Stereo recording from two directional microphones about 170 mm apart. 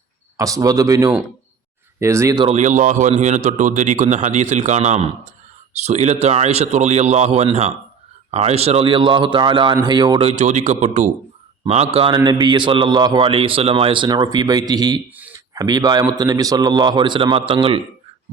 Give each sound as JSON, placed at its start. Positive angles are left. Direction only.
{"t": 0.3, "sound": "a man's voice", "side_deg": -20}
{"t": 2.4, "sound": "a man's voice", "side_deg": -40}
{"t": 10.2, "sound": "a man's voice", "side_deg": -40}